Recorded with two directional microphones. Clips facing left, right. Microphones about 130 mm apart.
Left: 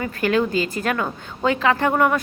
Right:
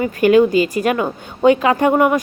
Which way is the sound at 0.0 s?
15° right (ahead or behind).